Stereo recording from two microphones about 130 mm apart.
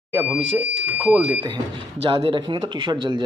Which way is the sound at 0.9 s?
10° right (ahead or behind).